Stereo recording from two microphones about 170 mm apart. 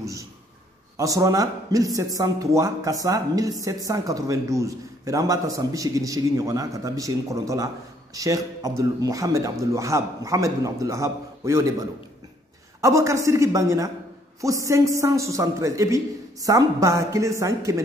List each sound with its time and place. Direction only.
0.0 s speech: 20° right (ahead or behind)
12.8 s a man's voice: 15° right (ahead or behind)